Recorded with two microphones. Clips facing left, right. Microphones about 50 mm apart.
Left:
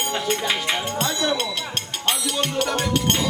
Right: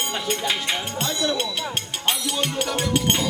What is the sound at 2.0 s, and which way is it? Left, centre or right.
Music, centre.